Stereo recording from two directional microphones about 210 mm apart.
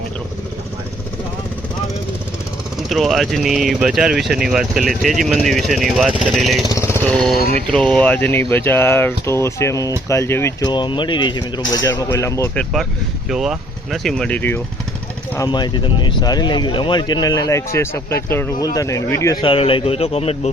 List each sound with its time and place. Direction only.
2.9 s speech: centre (ahead or behind)
6.7 s lawn mower: 10° left (ahead or behind)
7.9 s speech: 5° left (ahead or behind)
12.7 s speech: centre (ahead or behind)
15.4 s speech: 20° left (ahead or behind)